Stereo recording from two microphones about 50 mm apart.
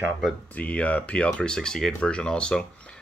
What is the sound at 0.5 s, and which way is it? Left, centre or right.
Speech, left.